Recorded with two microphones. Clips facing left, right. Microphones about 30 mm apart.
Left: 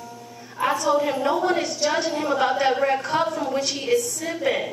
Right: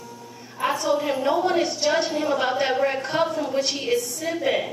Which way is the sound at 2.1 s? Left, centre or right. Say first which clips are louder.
Left 1 dB; centre.